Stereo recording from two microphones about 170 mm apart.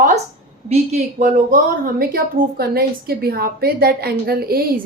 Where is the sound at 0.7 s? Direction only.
45° right (ahead or behind).